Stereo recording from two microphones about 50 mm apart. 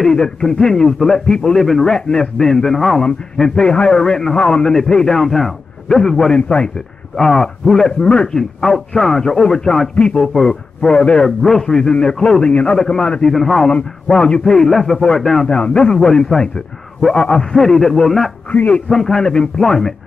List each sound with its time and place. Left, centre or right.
0.0 s a man's voice: centre
8.0 s a man's voice: centre
8.4 s a man's voice: centre
15.4 s a man's voice: centre
18.5 s a man's voice: left
18.9 s a man's voice: centre